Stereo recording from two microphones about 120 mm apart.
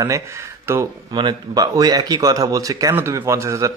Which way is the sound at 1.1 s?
35° right (ahead or behind).